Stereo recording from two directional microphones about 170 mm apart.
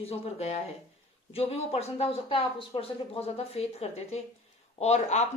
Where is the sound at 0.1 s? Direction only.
40° left (ahead or behind).